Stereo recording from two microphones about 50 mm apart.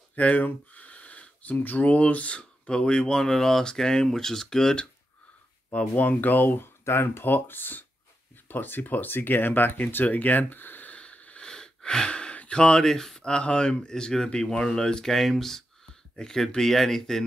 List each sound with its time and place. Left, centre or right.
0.1 s speech: left; by 4.8 s centre
5.7 s speech: left
6.8 s speech: left
11.0 s a sound: left
11.4 s gasp: centre
13.2 s speech: centre